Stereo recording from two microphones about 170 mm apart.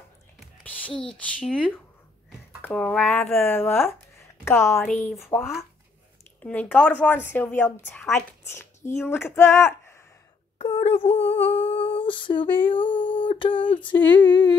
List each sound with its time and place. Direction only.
0.4 s a woman's voice: 5° left (ahead or behind)
6.4 s a woman's voice: 10° left (ahead or behind)
10.6 s speech: 35° left (ahead or behind)
11.4 s female singing: 35° left (ahead or behind)